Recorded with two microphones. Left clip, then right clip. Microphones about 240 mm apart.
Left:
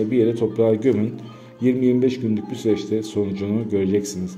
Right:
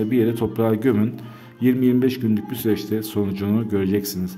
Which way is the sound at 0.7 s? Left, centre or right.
Right.